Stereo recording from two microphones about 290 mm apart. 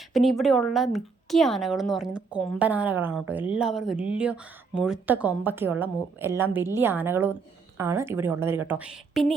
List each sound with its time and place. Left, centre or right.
0.1 s a woman's voice: centre